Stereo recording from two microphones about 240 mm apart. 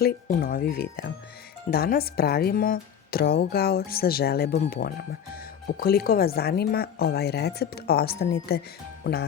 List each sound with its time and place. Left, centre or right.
0.0 s speech: left